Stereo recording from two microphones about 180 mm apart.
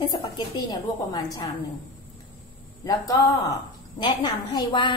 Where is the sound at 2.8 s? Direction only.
20° left (ahead or behind).